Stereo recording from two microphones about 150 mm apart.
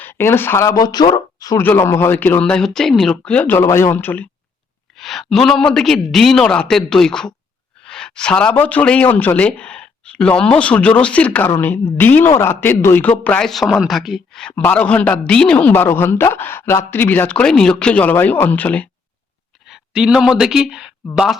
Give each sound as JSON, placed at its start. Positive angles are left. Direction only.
{"t": 0.0, "sound": "speech", "side_deg": 15}
{"t": 4.9, "sound": "a man's voice", "side_deg": 0}
{"t": 19.6, "sound": "speech", "side_deg": -5}